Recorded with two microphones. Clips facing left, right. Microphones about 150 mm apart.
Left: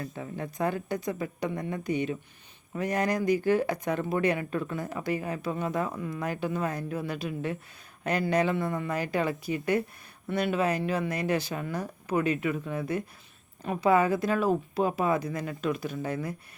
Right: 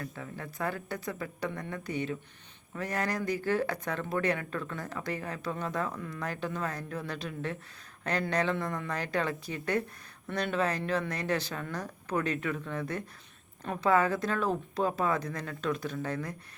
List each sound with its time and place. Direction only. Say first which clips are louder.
0.0 s speech: left 5 dB; 20° left (ahead or behind)